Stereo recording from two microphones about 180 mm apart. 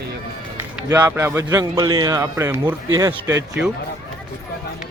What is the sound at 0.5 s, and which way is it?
A man's voice, 15° right (ahead or behind).